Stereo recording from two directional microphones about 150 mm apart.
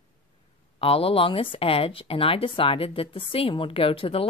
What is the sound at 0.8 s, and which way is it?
Speech, 40° left (ahead or behind).